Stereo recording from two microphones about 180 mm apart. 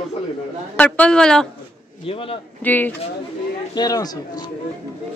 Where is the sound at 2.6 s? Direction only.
10° left (ahead or behind).